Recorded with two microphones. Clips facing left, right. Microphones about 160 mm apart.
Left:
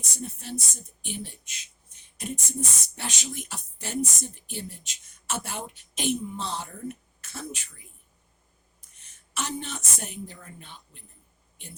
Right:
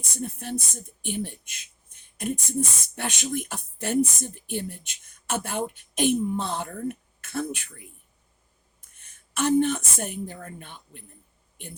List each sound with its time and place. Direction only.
0.2 s speech: 55° right (ahead or behind)
9.0 s a woman's voice: 55° right (ahead or behind)